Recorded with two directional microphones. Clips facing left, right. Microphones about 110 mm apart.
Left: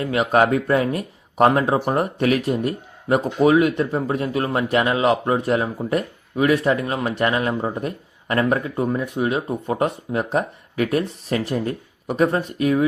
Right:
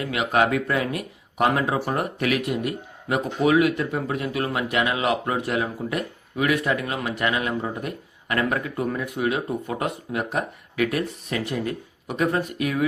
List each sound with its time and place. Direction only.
0.0 s speech: 35° left (ahead or behind)